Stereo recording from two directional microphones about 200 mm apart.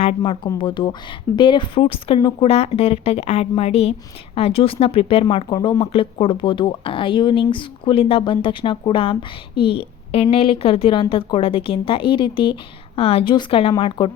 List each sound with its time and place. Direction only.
0.2 s speech: 25° left (ahead or behind)